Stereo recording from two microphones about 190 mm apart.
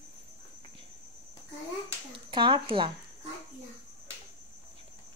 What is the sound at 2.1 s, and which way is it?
Speech, 25° right (ahead or behind).